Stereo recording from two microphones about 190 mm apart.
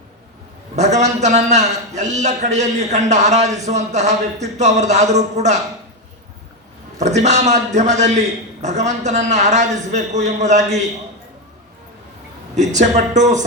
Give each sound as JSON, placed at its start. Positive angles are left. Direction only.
{"t": 0.8, "sound": "a man's voice", "side_deg": -40}
{"t": 7.0, "sound": "a man's voice", "side_deg": -35}
{"t": 12.5, "sound": "a man's voice", "side_deg": -40}